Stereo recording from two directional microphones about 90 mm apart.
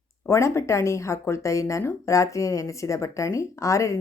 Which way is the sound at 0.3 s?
30° left (ahead or behind).